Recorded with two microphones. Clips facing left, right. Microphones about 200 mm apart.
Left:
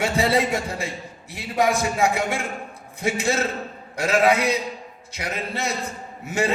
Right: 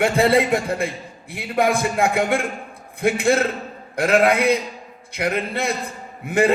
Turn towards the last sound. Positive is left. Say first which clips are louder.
# right 6 dB
turn(degrees=-55)  # may be behind; listen again after turning